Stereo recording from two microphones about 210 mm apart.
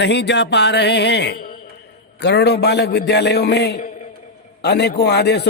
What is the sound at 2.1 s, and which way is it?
Speech, 55° left (ahead or behind).